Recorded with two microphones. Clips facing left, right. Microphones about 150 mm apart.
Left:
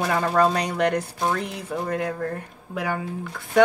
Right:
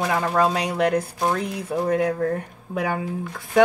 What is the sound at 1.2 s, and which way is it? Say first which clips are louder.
Speech: right 2 dB; 20° right (ahead or behind).